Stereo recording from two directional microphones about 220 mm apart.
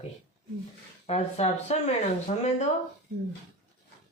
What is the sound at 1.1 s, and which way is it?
A woman's voice, 30° left (ahead or behind).